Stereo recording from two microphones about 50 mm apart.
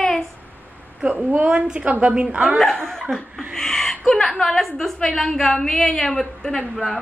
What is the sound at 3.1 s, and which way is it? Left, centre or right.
A woman's voice, centre.